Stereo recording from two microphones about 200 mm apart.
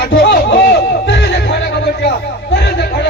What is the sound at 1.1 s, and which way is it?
Music, 50° left (ahead or behind).